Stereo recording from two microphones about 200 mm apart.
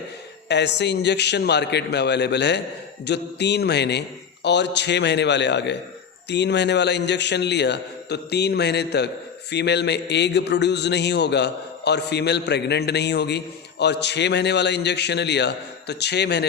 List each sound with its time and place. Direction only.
0.4 s a man's voice: 60° left (ahead or behind)